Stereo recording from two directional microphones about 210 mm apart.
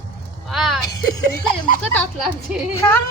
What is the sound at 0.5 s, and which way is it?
Speech, centre (ahead or behind).